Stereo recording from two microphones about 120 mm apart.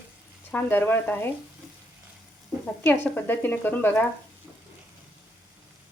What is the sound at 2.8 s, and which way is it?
Speech, 15° left (ahead or behind).